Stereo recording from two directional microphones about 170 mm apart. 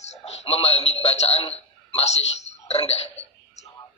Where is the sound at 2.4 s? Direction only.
40° left (ahead or behind).